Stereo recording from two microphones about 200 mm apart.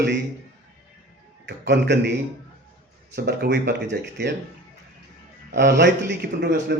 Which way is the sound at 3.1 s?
55° right (ahead or behind).